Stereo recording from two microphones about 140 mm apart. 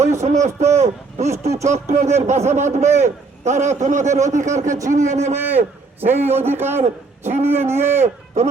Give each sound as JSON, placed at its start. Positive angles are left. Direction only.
{"t": 0.2, "sound": "a man's voice", "side_deg": -55}
{"t": 5.3, "sound": "a man's voice", "side_deg": -15}
{"t": 6.0, "sound": "a man's voice", "side_deg": -50}
{"t": 6.2, "sound": "a man's voice", "side_deg": -15}
{"t": 6.8, "sound": "a man's voice", "side_deg": -50}
{"t": 7.4, "sound": "a man's voice", "side_deg": -15}